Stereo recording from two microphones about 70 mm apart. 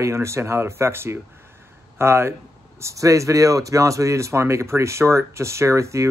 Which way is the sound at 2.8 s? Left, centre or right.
Right.